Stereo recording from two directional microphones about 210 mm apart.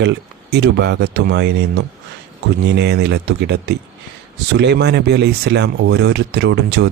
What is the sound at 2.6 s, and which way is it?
Speech, 50° right (ahead or behind).